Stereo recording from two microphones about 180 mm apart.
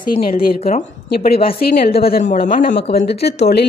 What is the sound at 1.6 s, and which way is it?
Speech, 60° left (ahead or behind).